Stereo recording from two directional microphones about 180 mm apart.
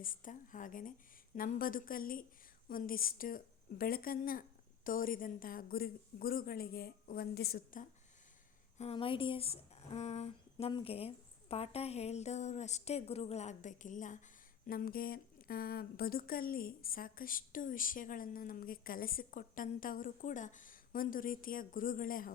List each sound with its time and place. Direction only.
0.0 s speech: 50° left (ahead or behind)
8.8 s speech: 30° left (ahead or behind); by 22.3 s 50° left (ahead or behind)